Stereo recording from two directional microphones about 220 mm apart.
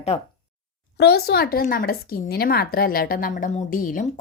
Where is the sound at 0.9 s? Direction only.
45° left (ahead or behind).